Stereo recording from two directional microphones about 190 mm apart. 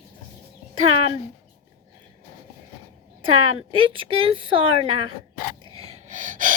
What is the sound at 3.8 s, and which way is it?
A child's voice, 25° right (ahead or behind).